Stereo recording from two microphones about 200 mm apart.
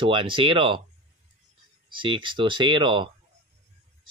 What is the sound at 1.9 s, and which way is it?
Speech, 25° right (ahead or behind).